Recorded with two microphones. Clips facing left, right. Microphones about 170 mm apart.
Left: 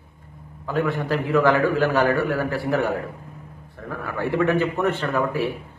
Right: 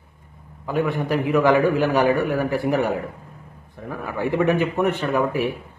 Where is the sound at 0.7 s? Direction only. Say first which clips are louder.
Right 1 dB; 15° right (ahead or behind).